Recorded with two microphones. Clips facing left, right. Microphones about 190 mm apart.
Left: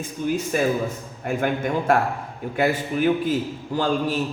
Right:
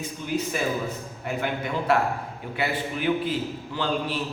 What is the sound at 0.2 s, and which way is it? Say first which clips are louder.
A man's voice: left 5 dB; 45° left (ahead or behind).